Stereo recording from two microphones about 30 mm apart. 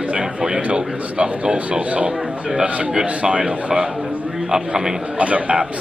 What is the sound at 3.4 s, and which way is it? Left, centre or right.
A man's voice, right.